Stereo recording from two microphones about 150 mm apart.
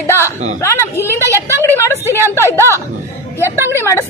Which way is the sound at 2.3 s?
15° left (ahead or behind).